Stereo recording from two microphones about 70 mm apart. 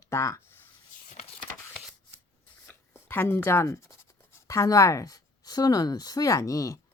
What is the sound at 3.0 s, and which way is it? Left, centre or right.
Speech, left.